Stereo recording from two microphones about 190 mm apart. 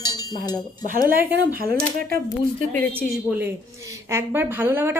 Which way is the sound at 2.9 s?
10° right (ahead or behind).